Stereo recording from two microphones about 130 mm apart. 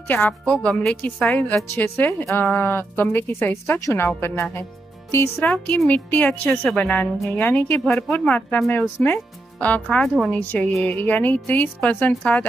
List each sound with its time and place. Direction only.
0.3 s speech: 5° left (ahead or behind)